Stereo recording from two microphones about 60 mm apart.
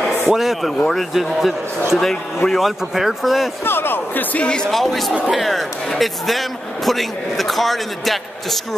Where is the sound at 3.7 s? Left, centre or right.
Left.